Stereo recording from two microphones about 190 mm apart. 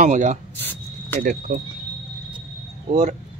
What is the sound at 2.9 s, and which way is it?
Speech, 35° right (ahead or behind).